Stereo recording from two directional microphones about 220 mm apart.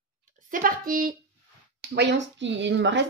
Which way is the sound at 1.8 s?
55° right (ahead or behind).